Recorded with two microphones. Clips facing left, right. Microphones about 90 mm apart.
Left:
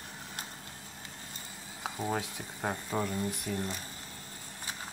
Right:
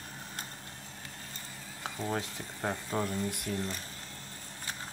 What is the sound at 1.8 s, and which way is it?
Speech, 10° left (ahead or behind).